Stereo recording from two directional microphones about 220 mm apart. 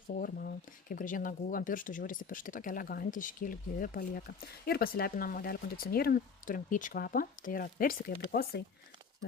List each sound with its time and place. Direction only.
0.2 s speech: 40° left (ahead or behind)